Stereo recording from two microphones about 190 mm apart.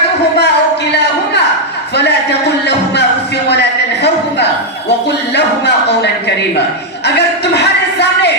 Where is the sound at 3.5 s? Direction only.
65° left (ahead or behind).